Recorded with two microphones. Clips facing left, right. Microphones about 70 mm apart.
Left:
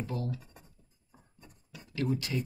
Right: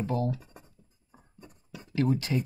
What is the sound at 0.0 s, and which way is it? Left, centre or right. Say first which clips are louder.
Speech: right 7 dB; right.